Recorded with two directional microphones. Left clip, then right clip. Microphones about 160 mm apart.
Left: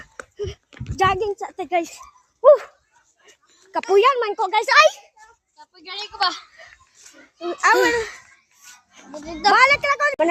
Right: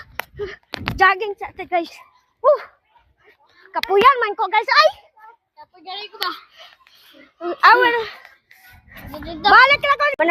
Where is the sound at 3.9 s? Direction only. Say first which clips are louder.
Right 2 dB; 25° left (ahead or behind).